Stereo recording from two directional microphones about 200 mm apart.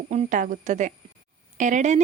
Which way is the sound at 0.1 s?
35° right (ahead or behind).